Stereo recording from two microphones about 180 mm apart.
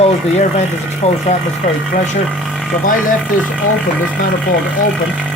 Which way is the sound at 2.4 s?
Centre (ahead or behind).